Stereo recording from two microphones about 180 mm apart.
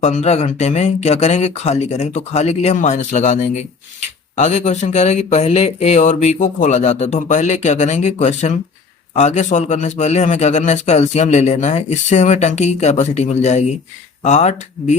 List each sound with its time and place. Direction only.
0.0 s a man's voice: 40° left (ahead or behind)